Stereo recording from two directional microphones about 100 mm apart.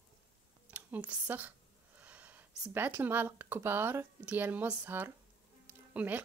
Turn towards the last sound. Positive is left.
turn(degrees=-15)  # may be behind; listen again after turning